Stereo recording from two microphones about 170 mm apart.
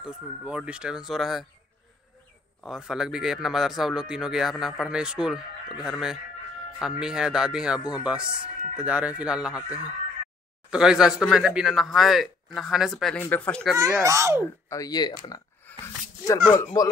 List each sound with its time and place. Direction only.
0.0 s speech: 5° right (ahead or behind)
2.6 s speech: centre (ahead or behind)
13.7 s speech: 20° right (ahead or behind)
14.7 s speech: 20° left (ahead or behind)
16.8 s speech: 20° left (ahead or behind)